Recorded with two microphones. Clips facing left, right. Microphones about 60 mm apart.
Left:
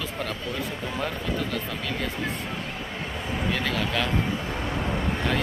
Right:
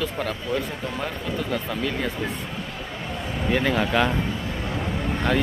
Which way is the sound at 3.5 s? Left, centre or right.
Right.